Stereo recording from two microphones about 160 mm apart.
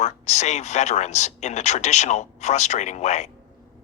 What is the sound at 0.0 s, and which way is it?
Speech, 45° left (ahead or behind).